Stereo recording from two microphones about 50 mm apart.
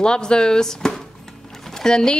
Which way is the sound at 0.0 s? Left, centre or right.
Centre.